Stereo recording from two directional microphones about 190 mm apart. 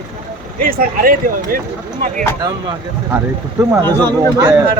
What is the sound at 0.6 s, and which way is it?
Speech, 50° right (ahead or behind).